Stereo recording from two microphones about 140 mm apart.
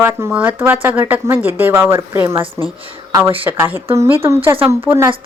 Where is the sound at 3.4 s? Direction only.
15° right (ahead or behind).